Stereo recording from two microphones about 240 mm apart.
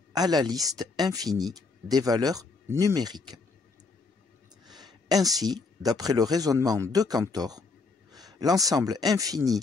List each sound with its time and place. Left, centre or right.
0.1 s speech: centre
4.6 s speech: centre